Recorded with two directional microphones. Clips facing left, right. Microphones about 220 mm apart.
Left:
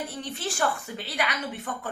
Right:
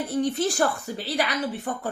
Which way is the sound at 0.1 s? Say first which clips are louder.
Right 10 dB; 45° right (ahead or behind).